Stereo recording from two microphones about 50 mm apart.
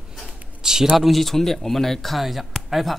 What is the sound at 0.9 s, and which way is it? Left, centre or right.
A man's voice, centre.